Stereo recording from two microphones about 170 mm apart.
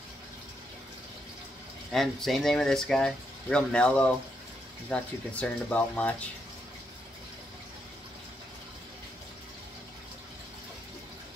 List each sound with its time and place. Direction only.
1.9 s speech: centre (ahead or behind)